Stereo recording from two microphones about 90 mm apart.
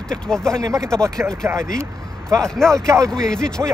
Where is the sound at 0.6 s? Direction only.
35° right (ahead or behind).